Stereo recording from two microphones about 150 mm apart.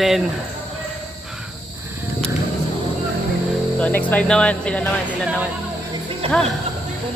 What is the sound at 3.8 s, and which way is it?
Speech, 10° left (ahead or behind).